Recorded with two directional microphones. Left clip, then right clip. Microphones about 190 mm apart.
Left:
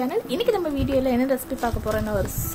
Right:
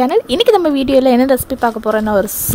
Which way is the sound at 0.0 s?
55° right (ahead or behind).